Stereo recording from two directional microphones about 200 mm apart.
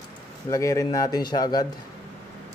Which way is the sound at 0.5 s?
15° left (ahead or behind).